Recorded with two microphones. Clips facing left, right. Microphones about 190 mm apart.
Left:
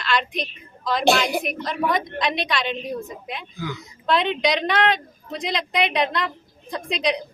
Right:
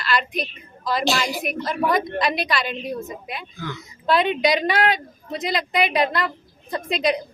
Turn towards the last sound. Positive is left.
turn(degrees=-5)  # may be behind; listen again after turning